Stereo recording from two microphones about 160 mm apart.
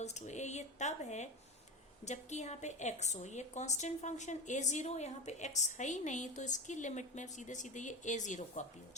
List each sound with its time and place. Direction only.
0.0 s a woman's voice: 45° left (ahead or behind)